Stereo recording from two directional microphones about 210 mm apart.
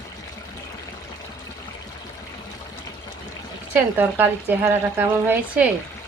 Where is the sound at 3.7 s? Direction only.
10° right (ahead or behind).